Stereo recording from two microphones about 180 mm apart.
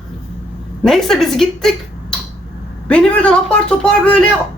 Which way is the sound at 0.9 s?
Centre (ahead or behind).